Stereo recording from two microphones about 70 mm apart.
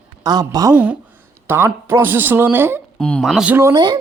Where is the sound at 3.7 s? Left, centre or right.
Right.